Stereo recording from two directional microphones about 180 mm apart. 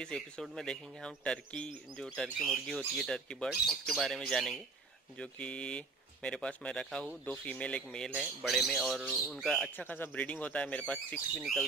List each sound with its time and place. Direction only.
0.0 s speech: 5° left (ahead or behind)